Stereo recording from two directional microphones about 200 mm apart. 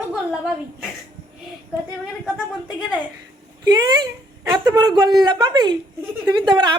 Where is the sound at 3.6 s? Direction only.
20° right (ahead or behind).